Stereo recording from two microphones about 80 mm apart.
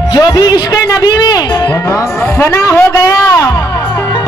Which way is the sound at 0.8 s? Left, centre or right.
Left.